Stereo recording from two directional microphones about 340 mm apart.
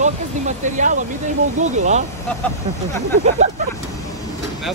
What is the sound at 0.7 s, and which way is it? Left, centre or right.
Speech, right.